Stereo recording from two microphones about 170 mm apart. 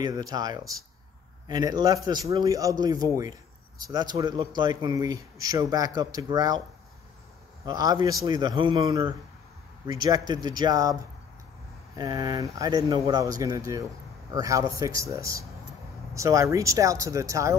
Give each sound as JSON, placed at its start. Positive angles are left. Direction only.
{"t": 0.0, "sound": "a man's voice", "side_deg": -20}
{"t": 7.6, "sound": "a man's voice", "side_deg": -20}